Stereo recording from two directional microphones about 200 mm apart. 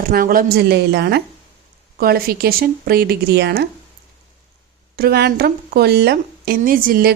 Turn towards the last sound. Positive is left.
turn(degrees=-45)  # may be behind; listen again after turning